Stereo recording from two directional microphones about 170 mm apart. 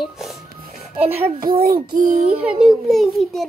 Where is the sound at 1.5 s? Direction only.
60° right (ahead or behind).